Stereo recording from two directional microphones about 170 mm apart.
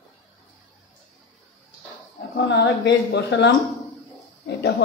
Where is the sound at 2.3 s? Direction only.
80° left.